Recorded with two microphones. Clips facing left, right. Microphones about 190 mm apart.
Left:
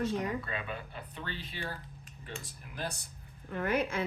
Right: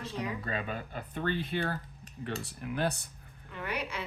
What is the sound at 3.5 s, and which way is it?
Speech, 50° left (ahead or behind).